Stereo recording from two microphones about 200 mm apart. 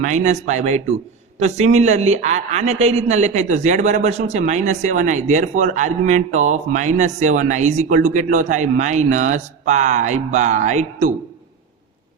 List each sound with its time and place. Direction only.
0.0 s a man's voice: 35° right (ahead or behind)